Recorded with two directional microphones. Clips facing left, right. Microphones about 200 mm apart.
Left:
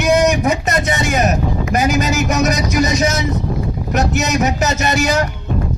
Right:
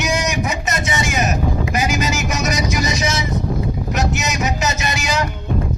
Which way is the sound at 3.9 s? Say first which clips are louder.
Left 7 dB; 60° left (ahead or behind).